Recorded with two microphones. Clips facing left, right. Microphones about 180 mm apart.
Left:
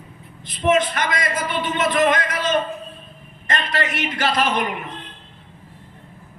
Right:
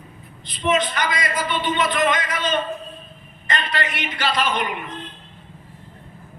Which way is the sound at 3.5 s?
45° left (ahead or behind).